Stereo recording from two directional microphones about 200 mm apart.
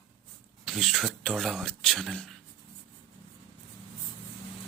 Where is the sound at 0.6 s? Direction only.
Centre (ahead or behind).